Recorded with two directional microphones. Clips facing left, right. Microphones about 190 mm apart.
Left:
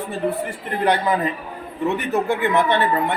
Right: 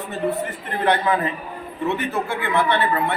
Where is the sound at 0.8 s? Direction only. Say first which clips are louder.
Left 1 dB; 15° left (ahead or behind).